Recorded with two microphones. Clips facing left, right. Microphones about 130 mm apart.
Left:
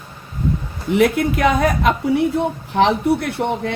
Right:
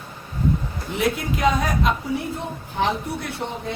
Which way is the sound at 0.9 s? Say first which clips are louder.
Left 8 dB; 65° left (ahead or behind).